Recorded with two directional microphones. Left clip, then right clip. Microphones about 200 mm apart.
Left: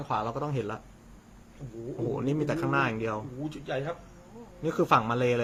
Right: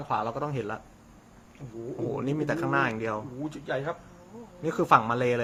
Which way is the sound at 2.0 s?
Centre (ahead or behind).